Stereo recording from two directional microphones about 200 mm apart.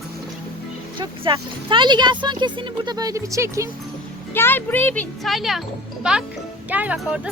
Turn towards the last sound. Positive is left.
turn(degrees=-5)  # may be behind; listen again after turning